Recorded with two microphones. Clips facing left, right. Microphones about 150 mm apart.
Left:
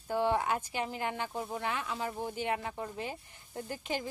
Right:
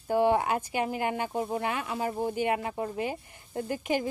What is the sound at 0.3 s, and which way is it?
Speech, 55° right (ahead or behind).